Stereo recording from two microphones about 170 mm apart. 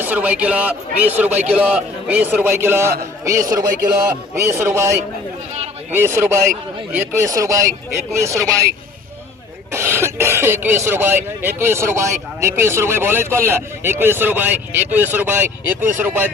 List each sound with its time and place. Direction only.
0.0 s speech: 10° right (ahead or behind)
9.7 s speech: 15° right (ahead or behind)